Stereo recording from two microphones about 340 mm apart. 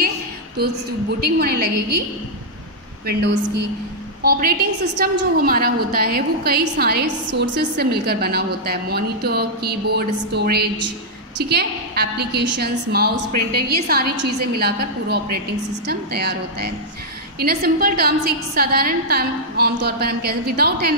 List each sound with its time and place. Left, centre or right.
0.6 s a woman's voice: right
3.1 s a woman's voice: right